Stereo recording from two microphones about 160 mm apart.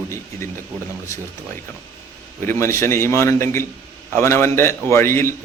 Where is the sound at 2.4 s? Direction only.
15° left (ahead or behind).